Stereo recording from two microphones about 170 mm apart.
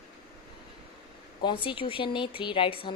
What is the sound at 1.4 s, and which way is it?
A woman's voice, 30° left (ahead or behind).